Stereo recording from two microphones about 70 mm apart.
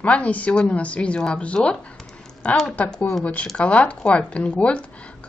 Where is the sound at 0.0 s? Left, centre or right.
Centre.